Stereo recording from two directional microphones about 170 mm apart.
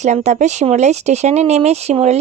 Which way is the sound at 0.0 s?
45° right (ahead or behind).